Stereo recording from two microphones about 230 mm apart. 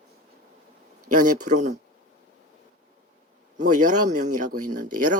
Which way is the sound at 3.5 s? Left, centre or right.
Right.